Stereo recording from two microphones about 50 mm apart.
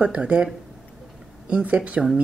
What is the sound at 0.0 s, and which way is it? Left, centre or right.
Speech, right.